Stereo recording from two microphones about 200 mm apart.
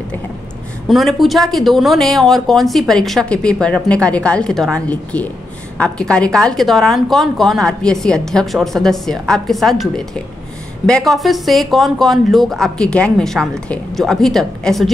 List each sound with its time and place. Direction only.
0.8 s speech: centre (ahead or behind)